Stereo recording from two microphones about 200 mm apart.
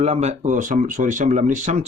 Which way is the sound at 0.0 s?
35° right (ahead or behind).